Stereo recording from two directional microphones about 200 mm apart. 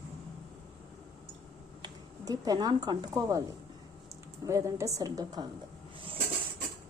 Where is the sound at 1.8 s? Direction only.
20° right (ahead or behind).